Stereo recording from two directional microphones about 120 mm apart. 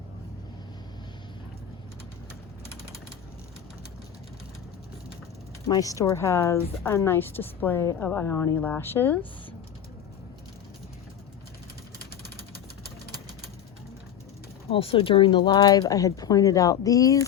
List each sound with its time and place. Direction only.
5.6 s a woman's voice: 30° left (ahead or behind)
14.7 s speech: 50° left (ahead or behind); by 17.2 s 30° left (ahead or behind)